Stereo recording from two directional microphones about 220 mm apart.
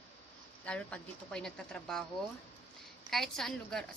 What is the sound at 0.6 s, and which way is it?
A woman's voice, 5° left (ahead or behind).